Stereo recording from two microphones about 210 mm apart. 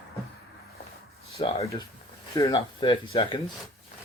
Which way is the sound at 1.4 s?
30° left (ahead or behind).